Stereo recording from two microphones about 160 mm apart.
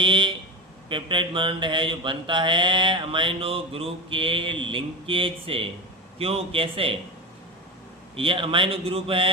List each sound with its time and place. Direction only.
0.0 s speech: 30° right (ahead or behind)
0.9 s mantra: 30° right (ahead or behind)
8.1 s mantra: 35° right (ahead or behind)